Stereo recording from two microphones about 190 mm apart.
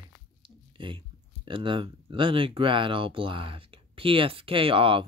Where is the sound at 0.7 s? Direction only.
25° right (ahead or behind).